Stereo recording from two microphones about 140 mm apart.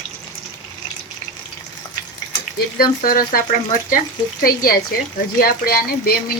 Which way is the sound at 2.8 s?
90° left.